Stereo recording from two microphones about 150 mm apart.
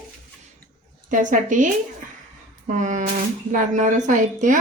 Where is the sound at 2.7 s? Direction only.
55° right (ahead or behind).